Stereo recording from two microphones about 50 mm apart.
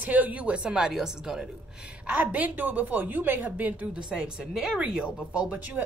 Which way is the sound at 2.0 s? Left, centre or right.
Right.